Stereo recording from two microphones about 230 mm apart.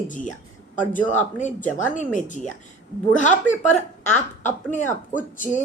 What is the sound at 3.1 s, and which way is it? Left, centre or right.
Speech, left.